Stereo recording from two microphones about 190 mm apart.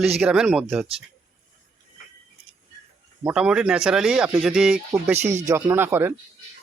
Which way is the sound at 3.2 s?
5° right (ahead or behind).